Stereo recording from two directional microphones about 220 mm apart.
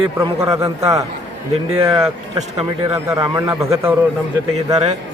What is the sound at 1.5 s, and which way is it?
Speech, 25° right (ahead or behind).